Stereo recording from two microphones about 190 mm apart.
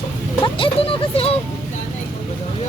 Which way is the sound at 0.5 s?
25° left (ahead or behind).